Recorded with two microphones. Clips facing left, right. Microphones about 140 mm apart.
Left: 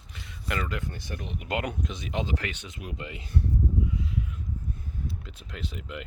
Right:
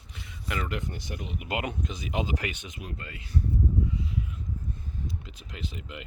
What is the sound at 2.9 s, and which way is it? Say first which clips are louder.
Speech: left 3 dB; 20° left (ahead or behind).